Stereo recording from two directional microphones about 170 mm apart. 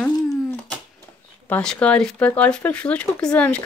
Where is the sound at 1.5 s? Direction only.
5° left (ahead or behind).